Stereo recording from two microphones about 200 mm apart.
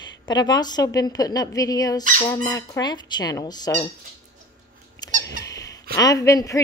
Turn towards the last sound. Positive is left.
turn(degrees=15)  # may be behind; listen again after turning